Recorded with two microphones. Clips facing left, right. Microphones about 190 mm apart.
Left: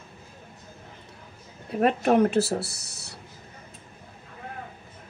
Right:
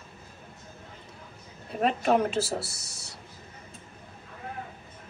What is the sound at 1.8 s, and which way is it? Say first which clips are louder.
Speech: left 4 dB; 60° left (ahead or behind).